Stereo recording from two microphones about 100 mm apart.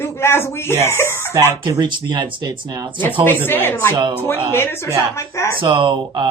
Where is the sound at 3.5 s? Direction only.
20° left (ahead or behind).